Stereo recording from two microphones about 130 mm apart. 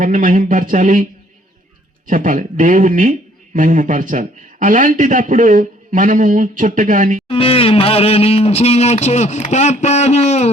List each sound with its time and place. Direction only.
0.0 s a man's voice: 85° right
2.0 s a man's voice: 90° right
7.3 s speech: 45° left (ahead or behind)